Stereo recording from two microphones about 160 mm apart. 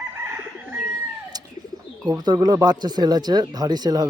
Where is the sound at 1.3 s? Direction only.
25° right (ahead or behind).